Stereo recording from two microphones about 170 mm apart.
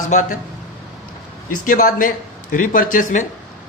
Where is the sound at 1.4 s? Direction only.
55° left (ahead or behind).